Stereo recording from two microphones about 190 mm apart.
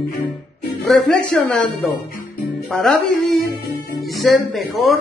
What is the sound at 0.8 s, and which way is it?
Speech, 5° left (ahead or behind).